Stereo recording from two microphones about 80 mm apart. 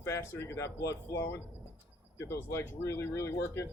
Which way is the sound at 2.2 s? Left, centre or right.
Left.